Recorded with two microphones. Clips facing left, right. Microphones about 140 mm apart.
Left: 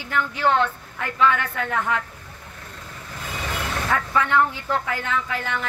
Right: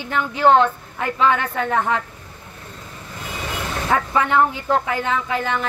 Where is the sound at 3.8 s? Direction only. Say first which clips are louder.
Right 4 dB; 25° right (ahead or behind).